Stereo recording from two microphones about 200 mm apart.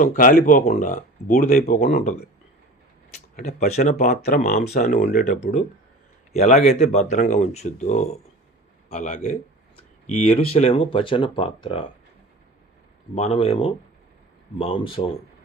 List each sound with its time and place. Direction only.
0.0 s speech: 40° left (ahead or behind)
3.3 s speech: 35° left (ahead or behind)
13.1 s speech: 30° left (ahead or behind)